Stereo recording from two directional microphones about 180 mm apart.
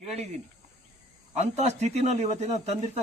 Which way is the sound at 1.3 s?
40° right (ahead or behind).